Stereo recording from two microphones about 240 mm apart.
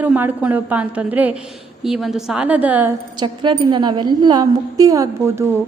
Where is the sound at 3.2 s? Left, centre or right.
Centre.